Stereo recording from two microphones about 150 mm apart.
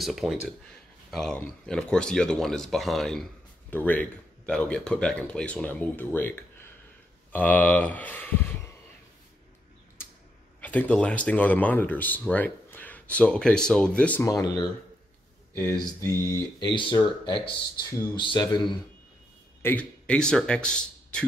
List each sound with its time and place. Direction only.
0.0 s speech: centre (ahead or behind)
10.6 s speech: 10° left (ahead or behind)
14.2 s speech: 25° left (ahead or behind)
16.5 s speech: 30° left (ahead or behind)
19.6 s speech: 10° left (ahead or behind)